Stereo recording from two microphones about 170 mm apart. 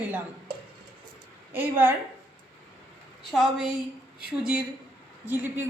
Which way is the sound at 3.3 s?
5° right (ahead or behind).